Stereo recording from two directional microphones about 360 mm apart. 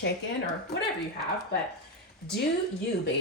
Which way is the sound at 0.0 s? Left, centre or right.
Left.